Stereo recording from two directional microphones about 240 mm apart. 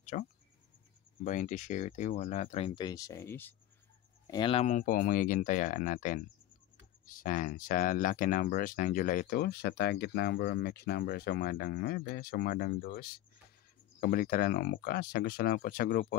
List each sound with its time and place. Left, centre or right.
0.0 s speech: left; by 3.5 s centre
4.3 s speech: left